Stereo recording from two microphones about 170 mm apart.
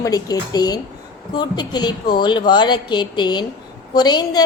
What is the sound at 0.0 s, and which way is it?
A woman's voice, 20° left (ahead or behind).